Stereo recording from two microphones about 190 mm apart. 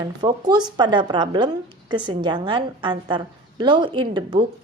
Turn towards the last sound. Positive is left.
turn(degrees=-25)  # may be behind; listen again after turning